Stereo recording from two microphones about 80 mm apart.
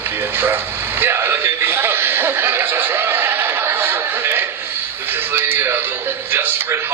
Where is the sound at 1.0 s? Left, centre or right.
Right.